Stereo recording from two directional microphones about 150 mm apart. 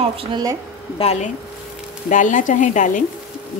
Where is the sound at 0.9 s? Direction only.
45° left (ahead or behind).